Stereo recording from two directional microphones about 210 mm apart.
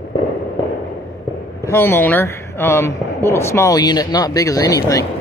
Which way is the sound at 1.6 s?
10° left (ahead or behind).